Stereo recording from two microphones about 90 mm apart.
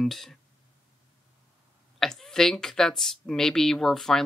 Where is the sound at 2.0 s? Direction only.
5° left (ahead or behind).